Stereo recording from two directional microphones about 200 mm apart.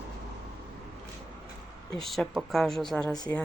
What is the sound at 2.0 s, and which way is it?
Speech, centre (ahead or behind).